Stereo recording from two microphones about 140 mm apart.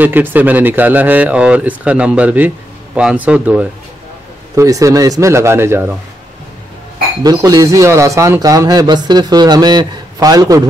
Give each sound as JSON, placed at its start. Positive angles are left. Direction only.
{"t": 0.0, "sound": "a man's voice", "side_deg": -15}
{"t": 4.6, "sound": "speech", "side_deg": -25}
{"t": 7.2, "sound": "speech", "side_deg": -25}